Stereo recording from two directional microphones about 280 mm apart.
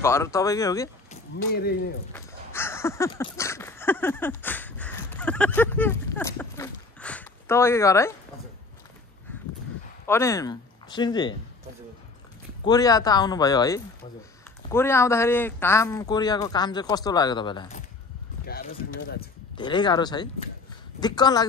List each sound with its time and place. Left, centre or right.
0.0 s speech: centre
2.1 s a sound: centre
10.0 s speech: centre
12.6 s speech: centre
18.5 s speech: left
19.5 s speech: centre